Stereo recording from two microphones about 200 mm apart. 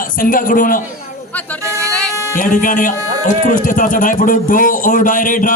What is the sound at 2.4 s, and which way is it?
Speech, 40° left (ahead or behind).